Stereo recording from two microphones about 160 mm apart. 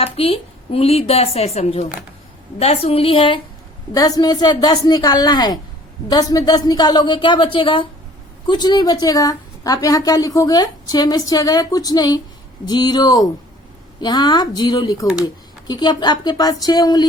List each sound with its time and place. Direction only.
0.0 s speech: 35° left (ahead or behind)
3.9 s a woman's voice: 25° left (ahead or behind)